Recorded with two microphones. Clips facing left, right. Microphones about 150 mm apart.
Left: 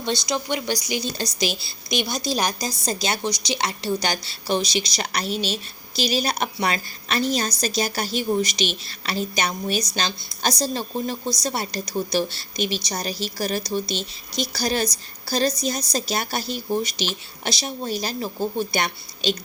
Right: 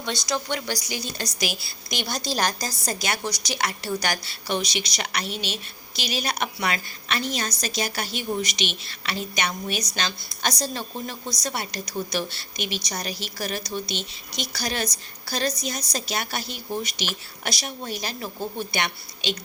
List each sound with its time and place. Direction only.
0.3 s a woman's voice: 15° left (ahead or behind)
2.0 s a woman's voice: 10° left (ahead or behind); by 19.4 s 35° left (ahead or behind)